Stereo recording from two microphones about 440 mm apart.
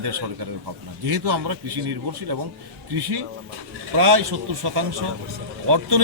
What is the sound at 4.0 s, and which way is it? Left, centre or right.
Speech, right.